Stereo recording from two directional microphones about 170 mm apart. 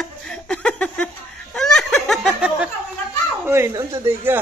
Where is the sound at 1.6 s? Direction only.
5° left (ahead or behind).